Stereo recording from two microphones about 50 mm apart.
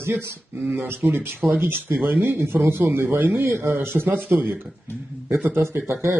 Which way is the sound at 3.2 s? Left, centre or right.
Right.